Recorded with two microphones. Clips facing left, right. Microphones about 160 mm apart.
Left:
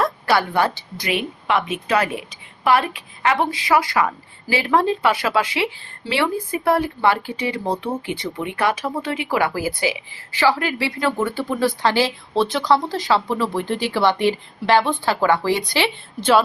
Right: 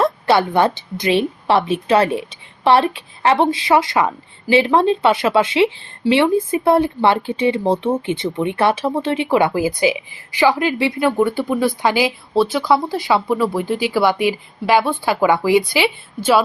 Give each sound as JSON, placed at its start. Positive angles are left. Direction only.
{"t": 0.0, "sound": "a woman's voice", "side_deg": -25}